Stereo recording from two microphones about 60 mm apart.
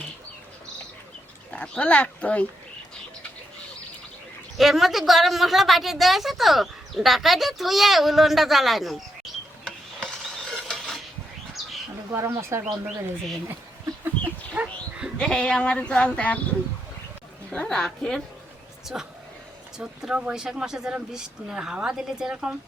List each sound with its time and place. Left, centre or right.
1.5 s speech: centre
4.5 s a woman's voice: centre
10.0 s a sound: centre
12.1 s speech: right
14.5 s dog: centre
15.2 s speech: centre
17.5 s speech: centre
18.9 s a woman's voice: centre